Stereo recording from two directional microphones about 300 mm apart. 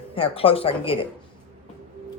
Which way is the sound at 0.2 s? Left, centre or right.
Centre.